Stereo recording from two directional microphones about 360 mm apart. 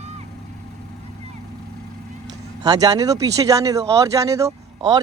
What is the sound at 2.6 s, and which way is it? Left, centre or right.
Speech, centre.